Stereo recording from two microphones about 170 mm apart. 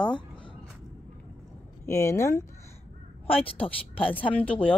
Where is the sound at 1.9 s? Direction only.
20° left (ahead or behind).